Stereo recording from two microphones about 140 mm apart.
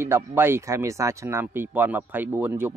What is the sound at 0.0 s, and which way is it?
Speech, 15° right (ahead or behind).